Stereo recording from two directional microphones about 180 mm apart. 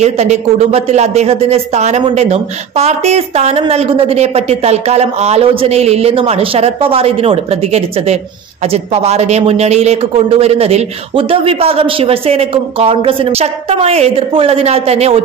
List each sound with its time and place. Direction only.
0.0 s speech: 40° right (ahead or behind)